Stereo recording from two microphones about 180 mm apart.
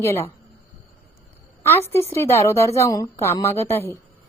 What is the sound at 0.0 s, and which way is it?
Speech, 15° left (ahead or behind).